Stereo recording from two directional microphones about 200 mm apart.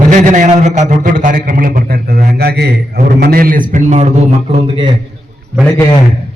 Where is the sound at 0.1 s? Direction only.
35° right (ahead or behind).